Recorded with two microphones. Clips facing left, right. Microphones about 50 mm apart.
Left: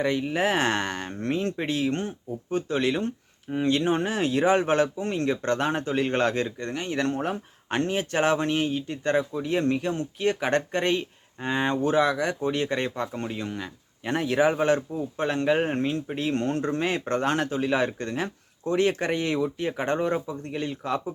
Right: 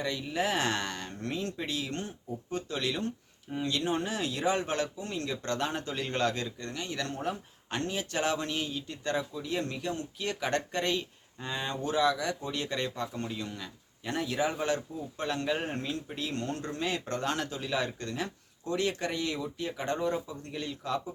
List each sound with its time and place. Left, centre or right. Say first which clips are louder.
0.0 s speech: left 7 dB; left